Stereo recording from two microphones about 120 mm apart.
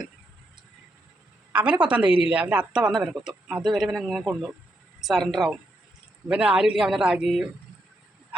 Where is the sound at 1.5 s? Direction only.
10° right (ahead or behind).